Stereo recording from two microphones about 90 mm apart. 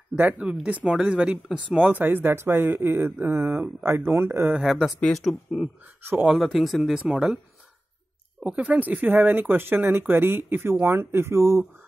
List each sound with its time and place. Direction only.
0.2 s speech: 15° right (ahead or behind)
4.6 s speech: 5° right (ahead or behind)
8.4 s speech: 15° right (ahead or behind); by 11.6 s 30° right (ahead or behind)